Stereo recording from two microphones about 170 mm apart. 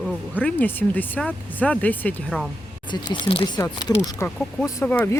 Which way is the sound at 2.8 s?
25° left (ahead or behind).